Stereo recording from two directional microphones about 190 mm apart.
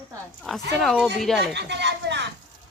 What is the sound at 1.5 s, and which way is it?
Speech, 65° right (ahead or behind).